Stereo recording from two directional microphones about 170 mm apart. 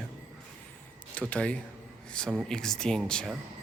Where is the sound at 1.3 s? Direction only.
5° left (ahead or behind).